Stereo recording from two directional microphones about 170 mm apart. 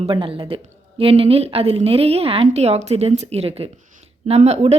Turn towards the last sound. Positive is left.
turn(degrees=-40)  # may be behind; listen again after turning